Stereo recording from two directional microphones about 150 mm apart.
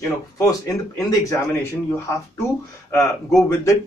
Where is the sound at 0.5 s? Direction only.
20° left (ahead or behind).